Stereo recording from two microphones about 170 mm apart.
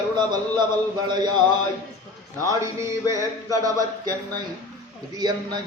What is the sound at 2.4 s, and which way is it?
Mantra, 20° right (ahead or behind).